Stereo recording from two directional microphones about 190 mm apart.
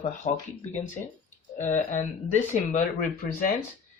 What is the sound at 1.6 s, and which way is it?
Speech, 40° left (ahead or behind).